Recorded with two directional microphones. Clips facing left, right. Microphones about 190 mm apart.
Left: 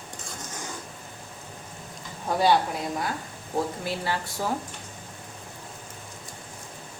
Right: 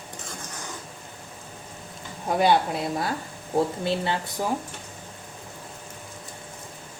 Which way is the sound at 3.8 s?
25° right (ahead or behind).